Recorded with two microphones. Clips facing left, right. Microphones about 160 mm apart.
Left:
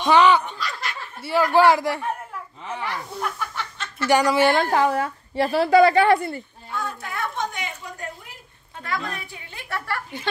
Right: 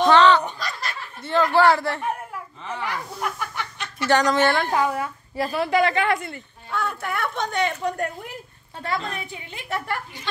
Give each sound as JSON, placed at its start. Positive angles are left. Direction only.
{"t": 0.0, "sound": "snicker", "side_deg": 10}
{"t": 0.6, "sound": "laughter", "side_deg": -40}
{"t": 1.2, "sound": "a man's voice", "side_deg": 10}
{"t": 2.8, "sound": "speech", "side_deg": -15}
{"t": 4.1, "sound": "a man's voice", "side_deg": 10}
{"t": 4.7, "sound": "a woman's voice", "side_deg": 30}
{"t": 6.7, "sound": "a woman's voice", "side_deg": -65}
{"t": 8.8, "sound": "a woman's voice", "side_deg": -25}